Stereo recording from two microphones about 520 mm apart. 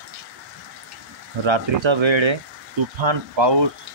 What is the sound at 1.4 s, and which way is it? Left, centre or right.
Speech, right.